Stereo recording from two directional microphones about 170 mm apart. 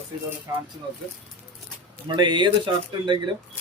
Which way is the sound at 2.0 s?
25° right (ahead or behind).